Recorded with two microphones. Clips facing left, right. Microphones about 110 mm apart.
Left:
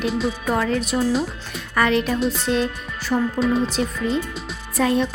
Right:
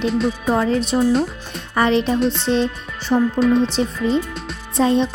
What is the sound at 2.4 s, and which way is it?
Speech, 30° right (ahead or behind).